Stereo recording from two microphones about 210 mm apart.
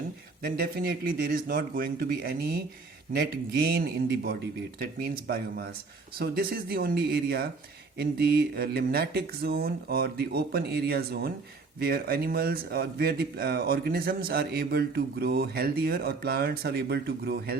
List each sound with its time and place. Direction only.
0.4 s speech: 45° right (ahead or behind)